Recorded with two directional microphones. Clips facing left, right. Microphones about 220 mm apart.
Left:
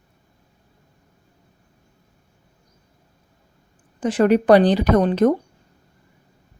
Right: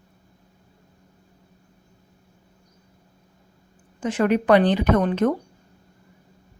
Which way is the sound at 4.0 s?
35° left (ahead or behind).